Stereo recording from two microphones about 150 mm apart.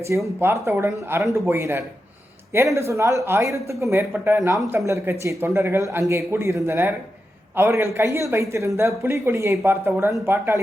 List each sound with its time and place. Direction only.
0.3 s speech: 20° right (ahead or behind)